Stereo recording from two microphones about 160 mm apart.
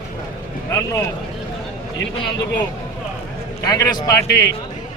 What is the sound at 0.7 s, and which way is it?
Speech, 20° left (ahead or behind).